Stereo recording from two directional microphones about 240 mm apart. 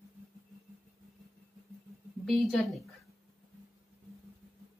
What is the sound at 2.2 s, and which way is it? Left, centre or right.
Speech, centre.